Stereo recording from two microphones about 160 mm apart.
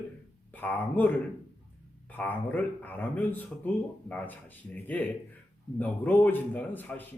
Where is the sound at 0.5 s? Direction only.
10° left (ahead or behind).